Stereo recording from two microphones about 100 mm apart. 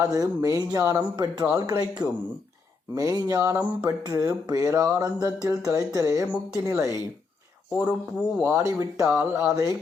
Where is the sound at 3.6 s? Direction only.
15° right (ahead or behind).